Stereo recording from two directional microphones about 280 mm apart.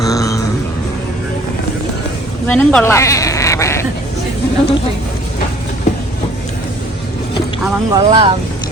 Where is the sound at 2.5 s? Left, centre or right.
Centre.